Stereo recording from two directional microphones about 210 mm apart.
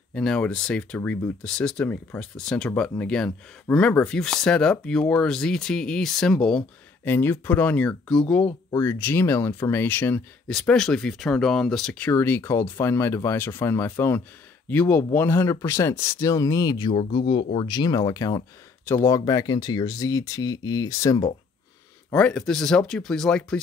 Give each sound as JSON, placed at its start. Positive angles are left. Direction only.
{"t": 0.1, "sound": "speech", "side_deg": 5}
{"t": 22.1, "sound": "speech", "side_deg": 5}